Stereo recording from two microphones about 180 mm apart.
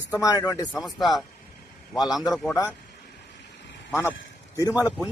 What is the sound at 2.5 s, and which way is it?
Speech, 20° left (ahead or behind).